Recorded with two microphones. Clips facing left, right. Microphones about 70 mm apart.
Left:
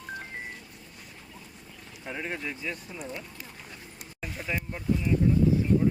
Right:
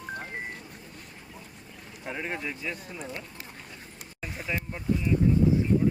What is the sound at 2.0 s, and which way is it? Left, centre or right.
Speech, centre.